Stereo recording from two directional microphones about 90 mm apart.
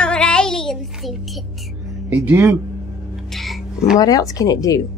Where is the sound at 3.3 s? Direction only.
Centre (ahead or behind).